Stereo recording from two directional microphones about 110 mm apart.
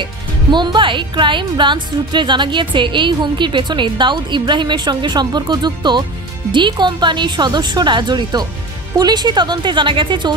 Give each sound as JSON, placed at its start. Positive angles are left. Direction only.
{"t": 0.0, "sound": "speech", "side_deg": -45}